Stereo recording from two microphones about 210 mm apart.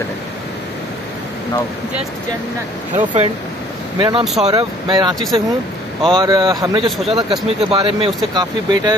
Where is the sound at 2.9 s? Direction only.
35° right (ahead or behind).